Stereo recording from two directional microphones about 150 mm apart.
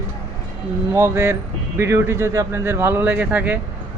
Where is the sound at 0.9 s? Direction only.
20° right (ahead or behind).